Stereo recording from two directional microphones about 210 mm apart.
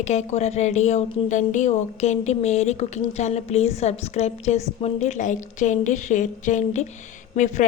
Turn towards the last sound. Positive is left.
turn(degrees=35)  # may be behind; listen again after turning